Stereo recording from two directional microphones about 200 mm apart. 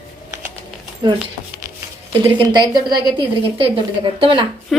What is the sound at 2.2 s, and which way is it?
A woman's voice, 25° right (ahead or behind).